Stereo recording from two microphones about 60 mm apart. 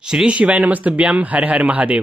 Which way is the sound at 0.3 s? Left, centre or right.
Right.